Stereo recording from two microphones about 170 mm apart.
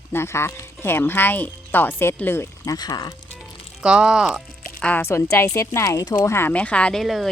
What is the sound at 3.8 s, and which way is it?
Speech, 5° right (ahead or behind).